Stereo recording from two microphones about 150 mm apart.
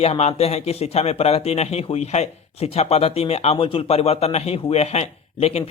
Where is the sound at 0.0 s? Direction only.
45° left (ahead or behind).